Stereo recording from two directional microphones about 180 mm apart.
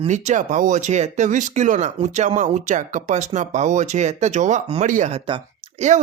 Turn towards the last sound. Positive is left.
turn(degrees=-30)  # may be behind; listen again after turning